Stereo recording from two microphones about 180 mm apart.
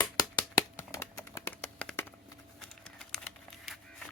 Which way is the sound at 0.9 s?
15° left (ahead or behind).